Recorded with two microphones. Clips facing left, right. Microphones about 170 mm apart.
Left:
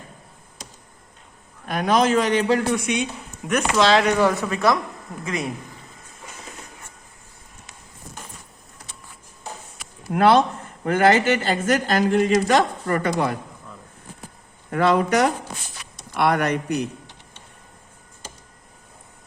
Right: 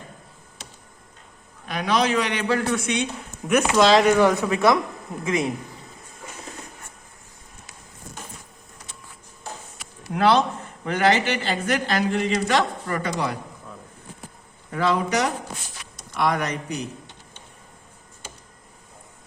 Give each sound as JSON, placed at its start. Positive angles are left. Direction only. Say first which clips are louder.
{"t": 1.6, "sound": "a woman's voice", "louder": "left 3 dB", "side_deg": 50}
{"t": 2.5, "sound": "a man's voice", "louder": "left 2 dB", "side_deg": 15}
{"t": 3.5, "sound": "speech", "louder": "right 1 dB", "side_deg": -5}
{"t": 4.4, "sound": "a man's voice", "louder": "right 2 dB", "side_deg": -15}
{"t": 10.1, "sound": "a woman's voice", "louder": "left 3 dB", "side_deg": 50}
{"t": 14.7, "sound": "speech", "louder": "left 4 dB", "side_deg": 60}